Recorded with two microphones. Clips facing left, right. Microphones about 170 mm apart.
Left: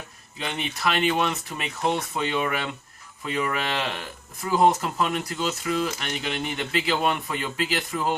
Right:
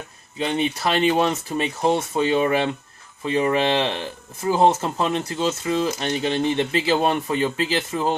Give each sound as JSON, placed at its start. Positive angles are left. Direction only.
{"t": 0.3, "sound": "speech", "side_deg": -35}